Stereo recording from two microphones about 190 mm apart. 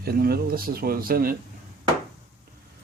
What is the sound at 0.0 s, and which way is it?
Speech, 55° right (ahead or behind).